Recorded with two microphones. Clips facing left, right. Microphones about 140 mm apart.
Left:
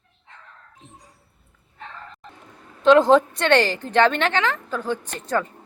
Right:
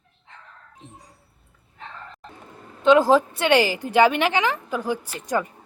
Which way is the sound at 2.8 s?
Centre (ahead or behind).